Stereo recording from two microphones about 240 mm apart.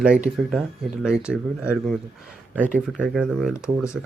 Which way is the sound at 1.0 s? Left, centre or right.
Centre.